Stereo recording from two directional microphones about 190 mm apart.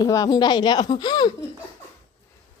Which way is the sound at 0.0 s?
20° left (ahead or behind).